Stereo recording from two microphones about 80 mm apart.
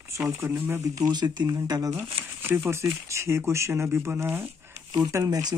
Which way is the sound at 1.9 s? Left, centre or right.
Right.